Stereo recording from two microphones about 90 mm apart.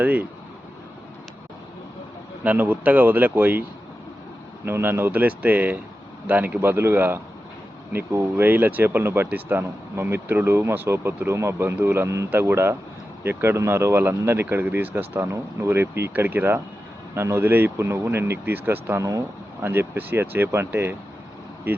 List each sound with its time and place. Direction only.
0.0 s speech: 15° right (ahead or behind)
2.4 s speech: 20° right (ahead or behind)
4.6 s speech: 25° right (ahead or behind)
12.3 s speech: 25° right (ahead or behind)
18.9 s speech: 40° right (ahead or behind)
19.6 s speech: 25° right (ahead or behind)